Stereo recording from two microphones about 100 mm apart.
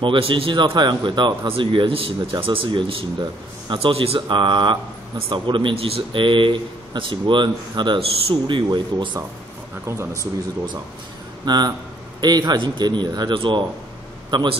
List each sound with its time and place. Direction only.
0.0 s a man's voice: 55° right (ahead or behind)
4.4 s a man's voice: 50° right (ahead or behind)
8.0 s a man's voice: 65° right (ahead or behind)
8.6 s speech: 45° right (ahead or behind)
11.4 s speech: 45° right (ahead or behind)
13.3 s a man's voice: 55° right (ahead or behind)